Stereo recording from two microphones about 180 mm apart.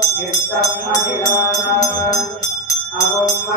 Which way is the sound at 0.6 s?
20° left (ahead or behind).